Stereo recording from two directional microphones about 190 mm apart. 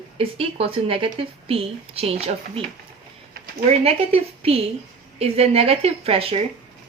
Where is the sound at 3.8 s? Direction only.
30° right (ahead or behind).